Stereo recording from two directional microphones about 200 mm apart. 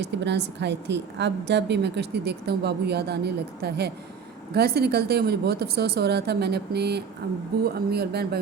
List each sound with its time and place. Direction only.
0.0 s a woman's voice: 60° right (ahead or behind)